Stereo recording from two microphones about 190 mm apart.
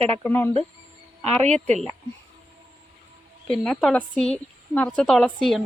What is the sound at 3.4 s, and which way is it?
Speech, centre (ahead or behind).